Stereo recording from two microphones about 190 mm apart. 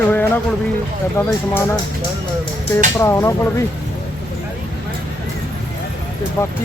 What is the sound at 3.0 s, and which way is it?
Speech, 15° left (ahead or behind).